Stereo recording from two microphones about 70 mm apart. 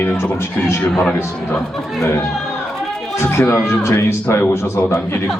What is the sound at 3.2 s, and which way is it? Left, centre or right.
Speech, left.